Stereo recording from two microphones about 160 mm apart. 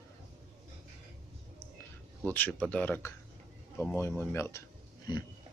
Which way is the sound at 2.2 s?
10° left (ahead or behind).